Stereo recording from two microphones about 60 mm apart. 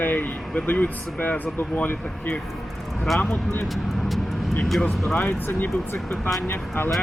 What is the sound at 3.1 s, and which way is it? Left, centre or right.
Speech, centre.